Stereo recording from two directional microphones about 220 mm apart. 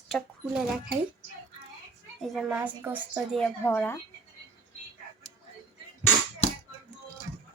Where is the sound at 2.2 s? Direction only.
Centre (ahead or behind).